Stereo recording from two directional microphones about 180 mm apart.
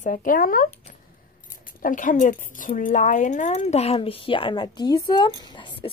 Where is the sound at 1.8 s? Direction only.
45° left (ahead or behind).